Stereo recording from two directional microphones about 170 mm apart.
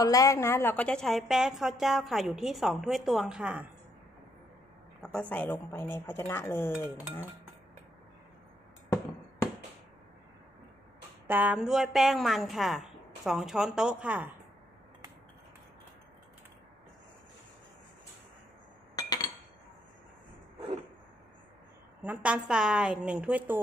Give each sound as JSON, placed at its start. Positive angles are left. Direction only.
{"t": 0.0, "sound": "a woman's voice", "side_deg": 20}
{"t": 5.3, "sound": "speech", "side_deg": 10}
{"t": 11.2, "sound": "a woman's voice", "side_deg": -10}
{"t": 18.9, "sound": "chink", "side_deg": 20}
{"t": 22.0, "sound": "a woman's voice", "side_deg": -10}